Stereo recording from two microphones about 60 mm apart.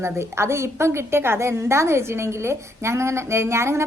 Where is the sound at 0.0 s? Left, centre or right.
Right.